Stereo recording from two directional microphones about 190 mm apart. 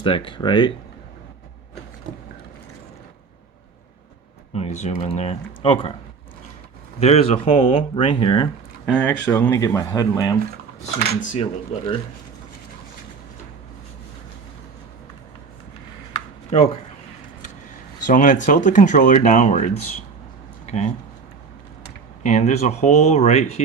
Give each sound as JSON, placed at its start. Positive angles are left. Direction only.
{"t": 0.0, "sound": "speech", "side_deg": 25}
{"t": 4.5, "sound": "speech", "side_deg": 35}
{"t": 7.0, "sound": "speech", "side_deg": 30}
{"t": 8.9, "sound": "speech", "side_deg": 5}
{"t": 11.2, "sound": "speech", "side_deg": 40}
{"t": 16.5, "sound": "speech", "side_deg": 35}
{"t": 18.0, "sound": "speech", "side_deg": 45}
{"t": 22.2, "sound": "speech", "side_deg": 40}